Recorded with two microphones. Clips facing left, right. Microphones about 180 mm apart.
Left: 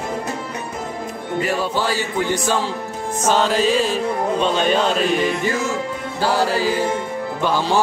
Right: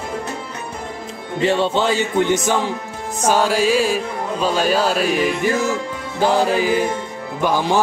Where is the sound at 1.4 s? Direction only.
25° right (ahead or behind); by 5.5 s 10° right (ahead or behind).